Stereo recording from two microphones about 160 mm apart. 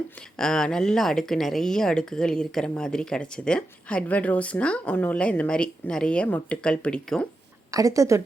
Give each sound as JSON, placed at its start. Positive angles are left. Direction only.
{"t": 0.3, "sound": "speech", "side_deg": 5}
{"t": 7.7, "sound": "a woman's voice", "side_deg": -20}